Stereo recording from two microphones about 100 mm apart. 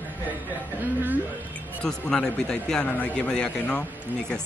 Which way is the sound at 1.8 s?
5° left (ahead or behind).